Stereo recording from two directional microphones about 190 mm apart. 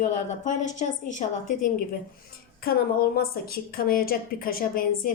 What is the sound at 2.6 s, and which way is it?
A woman's voice, 50° left (ahead or behind).